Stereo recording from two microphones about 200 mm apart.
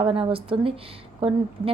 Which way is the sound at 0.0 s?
25° right (ahead or behind).